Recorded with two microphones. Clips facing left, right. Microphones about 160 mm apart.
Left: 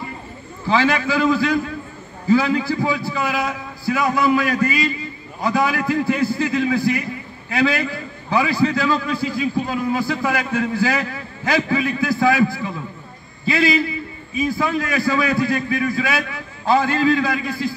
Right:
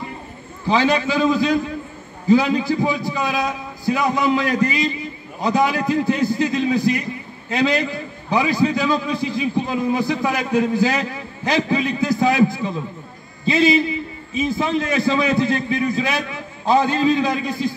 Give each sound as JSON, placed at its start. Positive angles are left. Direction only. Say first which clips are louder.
{"t": 0.7, "sound": "a man's voice", "louder": "right 1 dB", "side_deg": -20}